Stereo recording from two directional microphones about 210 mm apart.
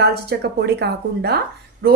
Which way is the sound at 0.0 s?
50° right (ahead or behind).